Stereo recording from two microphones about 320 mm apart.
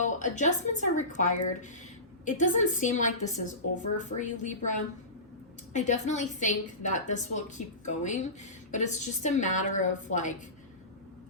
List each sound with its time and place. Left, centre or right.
0.0 s a woman's voice: left